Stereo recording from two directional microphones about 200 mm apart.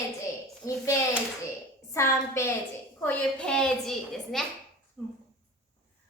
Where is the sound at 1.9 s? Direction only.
15° left (ahead or behind).